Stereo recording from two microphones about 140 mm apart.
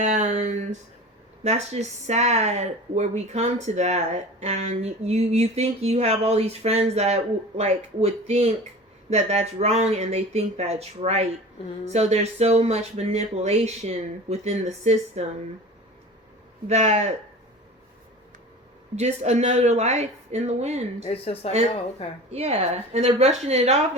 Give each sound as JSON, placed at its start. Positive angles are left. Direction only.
{"t": 0.0, "sound": "speech", "side_deg": -60}
{"t": 16.6, "sound": "speech", "side_deg": -55}
{"t": 18.9, "sound": "speech", "side_deg": -50}
{"t": 21.1, "sound": "a woman's voice", "side_deg": 45}
{"t": 22.3, "sound": "speech", "side_deg": -50}